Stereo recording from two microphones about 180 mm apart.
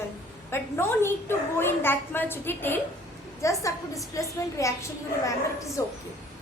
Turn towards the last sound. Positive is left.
turn(degrees=15)  # may be behind; listen again after turning